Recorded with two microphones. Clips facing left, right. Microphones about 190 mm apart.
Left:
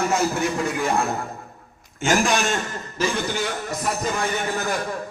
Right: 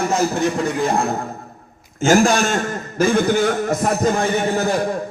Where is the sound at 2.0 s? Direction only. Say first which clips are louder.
Right 6 dB; 45° right (ahead or behind).